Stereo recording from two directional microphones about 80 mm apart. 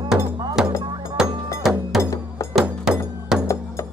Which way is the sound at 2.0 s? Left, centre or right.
Left.